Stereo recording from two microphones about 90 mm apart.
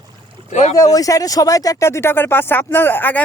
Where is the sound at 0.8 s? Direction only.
40° left (ahead or behind).